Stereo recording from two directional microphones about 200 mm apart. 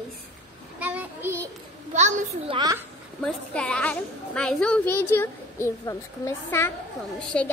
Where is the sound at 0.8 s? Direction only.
10° right (ahead or behind).